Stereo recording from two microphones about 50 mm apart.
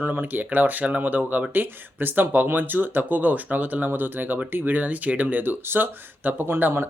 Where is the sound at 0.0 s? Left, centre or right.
Right.